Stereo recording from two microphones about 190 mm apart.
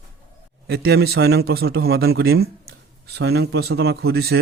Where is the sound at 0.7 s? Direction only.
55° right (ahead or behind).